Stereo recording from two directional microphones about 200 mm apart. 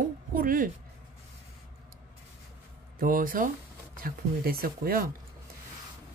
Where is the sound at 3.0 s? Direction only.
45° right (ahead or behind).